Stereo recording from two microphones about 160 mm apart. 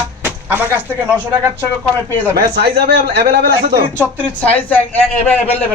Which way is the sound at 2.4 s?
90° right.